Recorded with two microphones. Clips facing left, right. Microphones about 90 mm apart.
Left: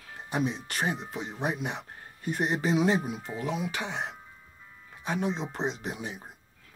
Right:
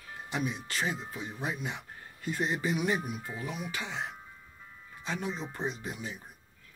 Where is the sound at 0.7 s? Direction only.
55° left (ahead or behind); by 1.3 s 75° left (ahead or behind).